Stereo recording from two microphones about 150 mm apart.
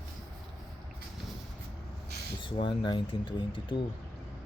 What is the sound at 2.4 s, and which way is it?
Speech, 35° left (ahead or behind).